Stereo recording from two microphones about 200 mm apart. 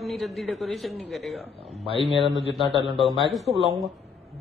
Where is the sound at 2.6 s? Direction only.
25° right (ahead or behind).